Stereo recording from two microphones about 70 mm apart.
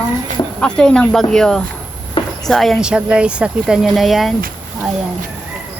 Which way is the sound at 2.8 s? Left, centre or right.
Centre.